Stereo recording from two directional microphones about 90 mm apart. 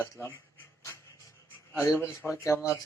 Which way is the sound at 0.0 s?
25° left (ahead or behind).